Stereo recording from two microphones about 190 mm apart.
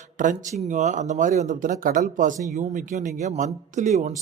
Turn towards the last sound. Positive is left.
turn(degrees=-35)  # may be behind; listen again after turning